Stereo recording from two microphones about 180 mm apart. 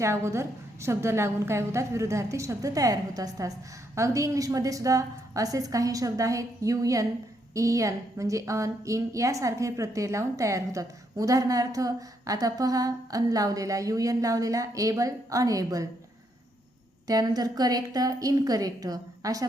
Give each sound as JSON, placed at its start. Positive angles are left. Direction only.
{"t": 0.0, "sound": "a woman's voice", "side_deg": -15}
{"t": 17.1, "sound": "a woman's voice", "side_deg": -20}